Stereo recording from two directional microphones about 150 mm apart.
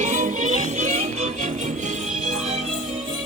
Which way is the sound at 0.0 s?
55° right (ahead or behind).